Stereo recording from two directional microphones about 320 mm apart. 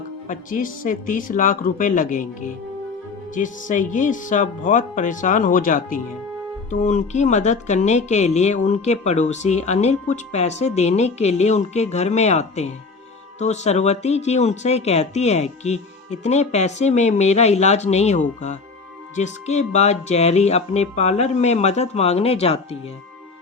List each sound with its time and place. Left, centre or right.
0.3 s speech: left